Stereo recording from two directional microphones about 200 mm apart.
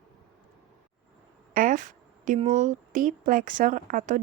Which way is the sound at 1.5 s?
40° right (ahead or behind).